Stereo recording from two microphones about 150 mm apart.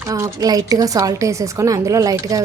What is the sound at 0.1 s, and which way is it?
Speech, 25° right (ahead or behind).